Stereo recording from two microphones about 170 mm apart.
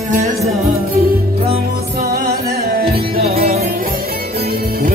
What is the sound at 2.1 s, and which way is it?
Music, 60° right (ahead or behind).